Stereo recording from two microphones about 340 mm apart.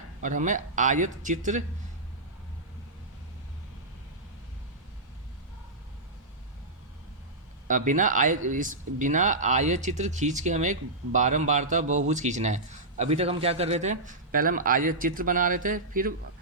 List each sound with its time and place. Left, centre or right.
0.2 s speech: right
7.7 s speech: right